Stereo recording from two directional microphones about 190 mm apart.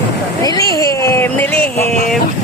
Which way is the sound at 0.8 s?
15° left (ahead or behind).